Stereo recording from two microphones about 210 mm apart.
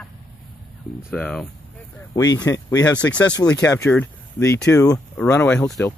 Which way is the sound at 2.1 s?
20° left (ahead or behind).